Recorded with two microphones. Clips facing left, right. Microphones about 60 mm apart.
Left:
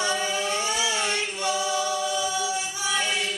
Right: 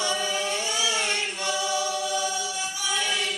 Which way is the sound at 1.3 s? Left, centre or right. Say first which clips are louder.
Left 1 dB; left.